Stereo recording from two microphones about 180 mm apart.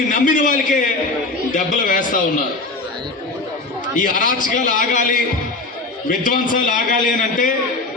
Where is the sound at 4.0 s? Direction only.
50° left (ahead or behind).